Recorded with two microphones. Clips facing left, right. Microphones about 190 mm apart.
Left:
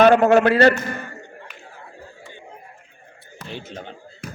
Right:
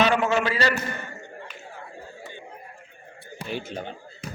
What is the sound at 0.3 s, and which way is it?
Speech, 60° left (ahead or behind).